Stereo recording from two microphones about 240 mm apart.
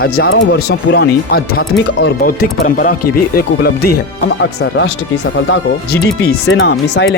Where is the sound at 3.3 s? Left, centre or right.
Left.